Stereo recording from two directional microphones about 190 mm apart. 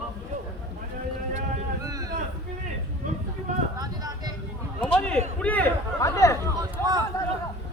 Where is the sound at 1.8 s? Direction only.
20° right (ahead or behind).